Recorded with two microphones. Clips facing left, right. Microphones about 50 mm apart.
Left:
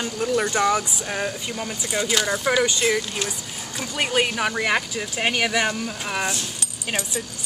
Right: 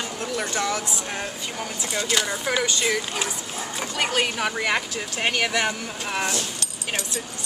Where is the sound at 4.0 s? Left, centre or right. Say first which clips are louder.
Left 2 dB; centre.